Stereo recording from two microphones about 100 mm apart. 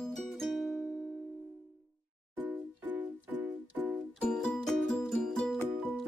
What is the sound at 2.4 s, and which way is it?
Music, 15° right (ahead or behind).